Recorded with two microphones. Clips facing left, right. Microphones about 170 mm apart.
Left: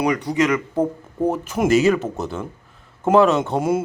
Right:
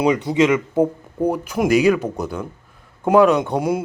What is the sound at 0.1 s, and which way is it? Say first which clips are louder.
Speech: right 3 dB; 25° right (ahead or behind).